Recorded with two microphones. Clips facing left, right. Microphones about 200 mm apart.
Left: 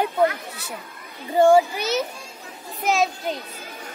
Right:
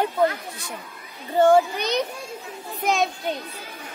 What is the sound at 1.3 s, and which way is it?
A woman's voice, 10° left (ahead or behind).